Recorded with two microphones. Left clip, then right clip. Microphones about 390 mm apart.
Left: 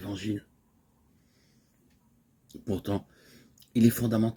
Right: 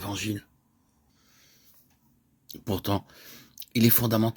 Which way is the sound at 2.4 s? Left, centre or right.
Right.